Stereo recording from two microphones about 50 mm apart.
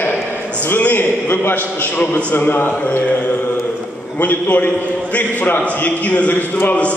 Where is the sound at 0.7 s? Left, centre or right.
Left.